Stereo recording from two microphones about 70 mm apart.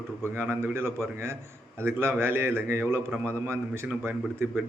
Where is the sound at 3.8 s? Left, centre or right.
Right.